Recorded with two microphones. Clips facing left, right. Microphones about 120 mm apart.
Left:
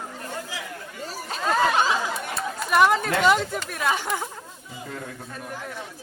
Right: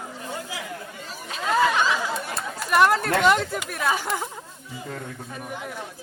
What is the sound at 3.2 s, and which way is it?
Speech, centre (ahead or behind).